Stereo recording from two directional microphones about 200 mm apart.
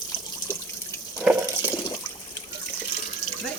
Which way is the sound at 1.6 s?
20° left (ahead or behind).